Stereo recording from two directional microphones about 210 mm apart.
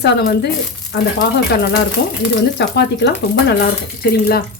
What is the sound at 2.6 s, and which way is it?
Speech, 55° left (ahead or behind).